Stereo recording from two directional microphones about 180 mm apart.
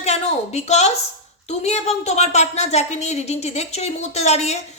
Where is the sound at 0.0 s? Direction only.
40° left (ahead or behind).